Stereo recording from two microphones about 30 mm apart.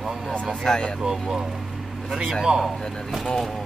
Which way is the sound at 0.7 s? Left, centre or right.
Left.